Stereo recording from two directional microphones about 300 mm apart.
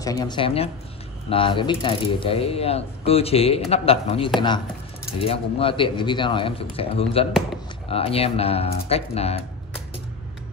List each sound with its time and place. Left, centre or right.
0.0 s speech: centre